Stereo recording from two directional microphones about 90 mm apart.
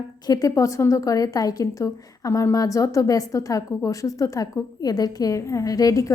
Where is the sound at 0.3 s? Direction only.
40° left (ahead or behind).